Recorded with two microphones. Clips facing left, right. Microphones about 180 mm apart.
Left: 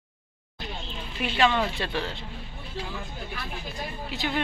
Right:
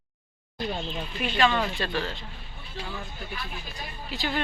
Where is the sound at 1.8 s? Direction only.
20° left (ahead or behind).